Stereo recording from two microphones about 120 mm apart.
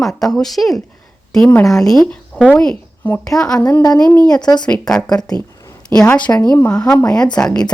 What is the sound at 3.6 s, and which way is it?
Speech, 35° left (ahead or behind).